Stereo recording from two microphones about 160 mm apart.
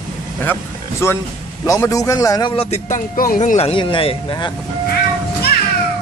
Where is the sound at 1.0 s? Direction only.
15° left (ahead or behind).